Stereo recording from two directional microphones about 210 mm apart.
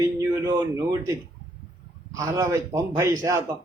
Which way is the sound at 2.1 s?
15° right (ahead or behind).